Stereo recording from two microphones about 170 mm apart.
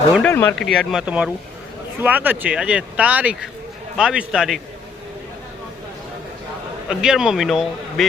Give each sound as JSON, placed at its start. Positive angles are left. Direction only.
{"t": 0.2, "sound": "speech", "side_deg": 10}
{"t": 7.0, "sound": "speech", "side_deg": -5}